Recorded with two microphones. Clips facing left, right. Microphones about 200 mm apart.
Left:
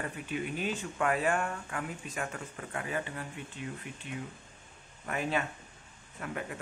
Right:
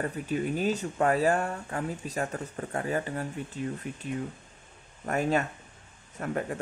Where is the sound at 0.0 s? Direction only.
40° right (ahead or behind).